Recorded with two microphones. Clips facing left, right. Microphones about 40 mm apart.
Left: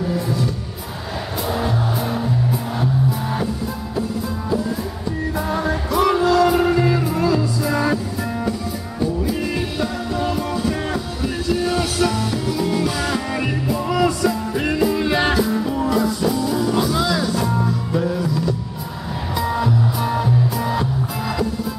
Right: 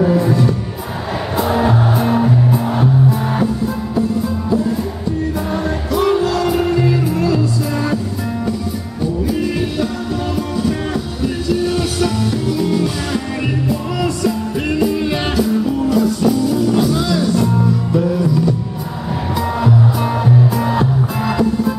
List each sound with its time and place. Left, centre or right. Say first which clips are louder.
0.0 s music: right 8 dB; right
5.5 s music: right 2 dB; centre
9.0 s music: right 3 dB; centre
11.4 s music: right 2 dB; centre